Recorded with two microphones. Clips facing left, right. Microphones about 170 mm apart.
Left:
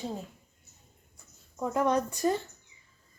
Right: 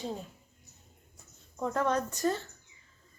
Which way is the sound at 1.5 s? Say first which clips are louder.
Left 3 dB; 5° left (ahead or behind).